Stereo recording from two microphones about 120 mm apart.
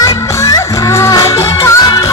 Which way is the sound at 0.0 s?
30° left (ahead or behind).